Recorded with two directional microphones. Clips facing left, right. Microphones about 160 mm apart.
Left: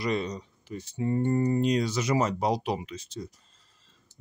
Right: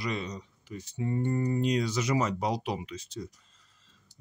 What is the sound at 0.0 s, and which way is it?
Speech, 35° left (ahead or behind).